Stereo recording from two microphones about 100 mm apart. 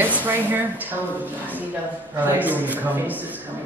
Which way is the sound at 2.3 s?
15° right (ahead or behind).